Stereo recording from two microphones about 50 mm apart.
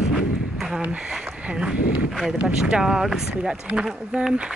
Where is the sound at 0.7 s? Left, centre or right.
Centre.